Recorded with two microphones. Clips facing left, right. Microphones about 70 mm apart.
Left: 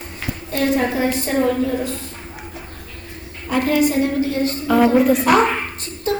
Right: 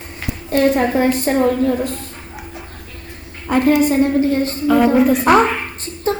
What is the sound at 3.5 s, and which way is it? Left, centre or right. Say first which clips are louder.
A woman's voice: right 4 dB; right.